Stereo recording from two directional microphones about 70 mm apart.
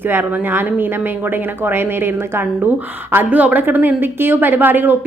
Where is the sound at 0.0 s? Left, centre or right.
Right.